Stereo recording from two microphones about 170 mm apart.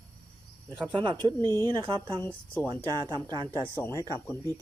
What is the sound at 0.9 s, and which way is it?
Speech, 30° right (ahead or behind).